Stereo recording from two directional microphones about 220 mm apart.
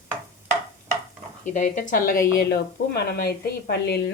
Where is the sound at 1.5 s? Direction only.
35° left (ahead or behind).